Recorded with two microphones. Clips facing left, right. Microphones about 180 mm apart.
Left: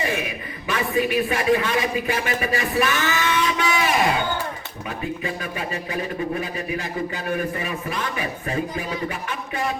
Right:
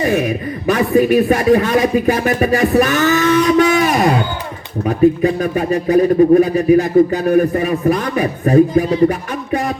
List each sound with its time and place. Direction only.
0.0 s speech: 40° right (ahead or behind)
9.0 s music: 45° right (ahead or behind)